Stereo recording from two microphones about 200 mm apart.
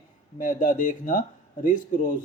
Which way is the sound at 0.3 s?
45° left (ahead or behind).